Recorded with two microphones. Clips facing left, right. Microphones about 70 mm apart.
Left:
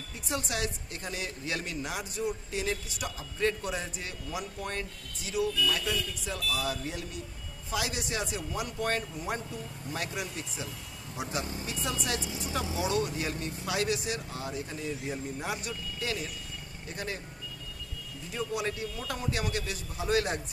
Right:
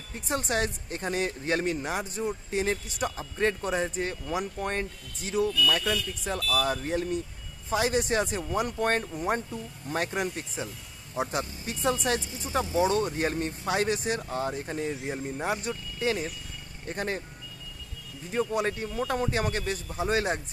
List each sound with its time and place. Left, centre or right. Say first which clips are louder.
0.1 s speech: right 5 dB; right
18.3 s speech: right 5 dB; right